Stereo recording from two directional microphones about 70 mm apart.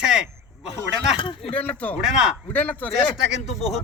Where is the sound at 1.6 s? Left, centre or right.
Left.